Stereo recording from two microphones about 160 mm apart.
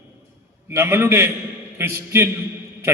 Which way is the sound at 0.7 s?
15° right (ahead or behind).